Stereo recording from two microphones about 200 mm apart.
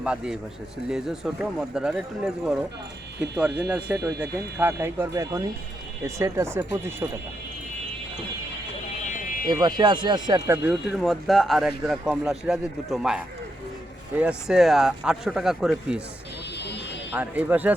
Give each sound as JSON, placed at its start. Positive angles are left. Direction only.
{"t": 0.0, "sound": "speech", "side_deg": -5}
{"t": 3.6, "sound": "speech", "side_deg": -10}
{"t": 9.1, "sound": "fire alarm", "side_deg": 40}
{"t": 9.5, "sound": "speech", "side_deg": -20}
{"t": 10.9, "sound": "speech", "side_deg": 0}
{"t": 17.1, "sound": "speech", "side_deg": -5}